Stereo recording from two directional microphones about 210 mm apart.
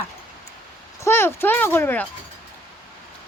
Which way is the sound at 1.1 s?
10° left (ahead or behind).